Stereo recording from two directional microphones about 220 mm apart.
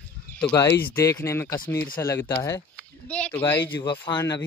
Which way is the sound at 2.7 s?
5° left (ahead or behind).